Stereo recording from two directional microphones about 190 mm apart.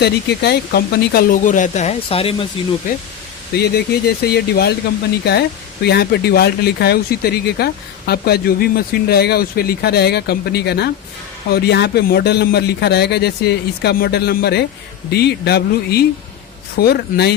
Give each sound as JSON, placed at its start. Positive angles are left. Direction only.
{"t": 0.0, "sound": "speech", "side_deg": 60}
{"t": 3.5, "sound": "speech", "side_deg": 55}